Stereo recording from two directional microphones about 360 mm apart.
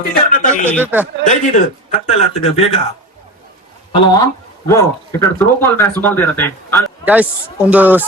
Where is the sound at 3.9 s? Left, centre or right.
Centre.